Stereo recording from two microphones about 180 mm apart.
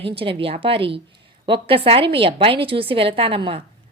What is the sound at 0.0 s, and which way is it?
A woman's voice, 30° right (ahead or behind).